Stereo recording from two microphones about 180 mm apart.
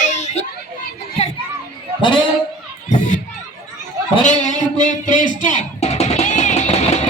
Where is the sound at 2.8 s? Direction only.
40° left (ahead or behind).